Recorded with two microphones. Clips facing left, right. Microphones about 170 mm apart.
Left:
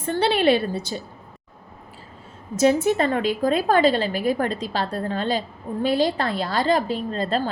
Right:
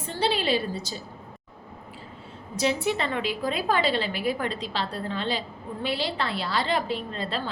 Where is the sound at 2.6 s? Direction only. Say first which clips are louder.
Left 7 dB; 45° left (ahead or behind).